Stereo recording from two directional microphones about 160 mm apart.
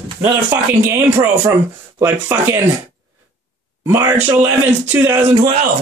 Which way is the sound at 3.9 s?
15° right (ahead or behind).